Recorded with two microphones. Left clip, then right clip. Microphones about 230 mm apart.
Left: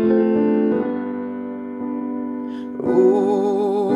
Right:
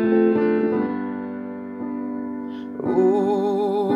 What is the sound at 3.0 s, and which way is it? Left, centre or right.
Music, centre.